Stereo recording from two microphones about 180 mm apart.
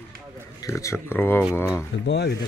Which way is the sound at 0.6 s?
15° left (ahead or behind).